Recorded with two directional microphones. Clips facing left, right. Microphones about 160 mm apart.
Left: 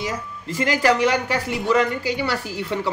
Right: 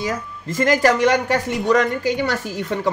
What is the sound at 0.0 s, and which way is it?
Speech, 45° right (ahead or behind).